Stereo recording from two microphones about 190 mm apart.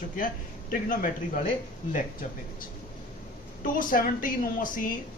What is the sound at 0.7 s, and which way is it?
Speech, 45° left (ahead or behind).